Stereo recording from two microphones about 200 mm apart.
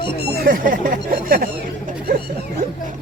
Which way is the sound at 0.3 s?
45° right (ahead or behind).